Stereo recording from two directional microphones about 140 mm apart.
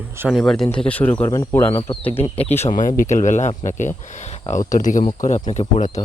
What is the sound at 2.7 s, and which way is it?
Speech, 70° left (ahead or behind).